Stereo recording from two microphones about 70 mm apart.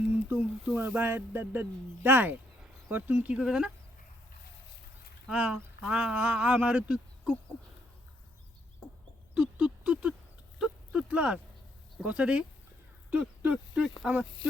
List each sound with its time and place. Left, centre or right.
0.1 s a sound: right
2.0 s speech: right
3.3 s speech: centre
5.3 s speech: centre
9.3 s a sound: centre
11.1 s speech: centre